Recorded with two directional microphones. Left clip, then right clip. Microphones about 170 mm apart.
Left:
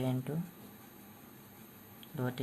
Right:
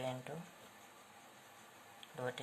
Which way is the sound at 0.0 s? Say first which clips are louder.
Left 5 dB; 10° left (ahead or behind).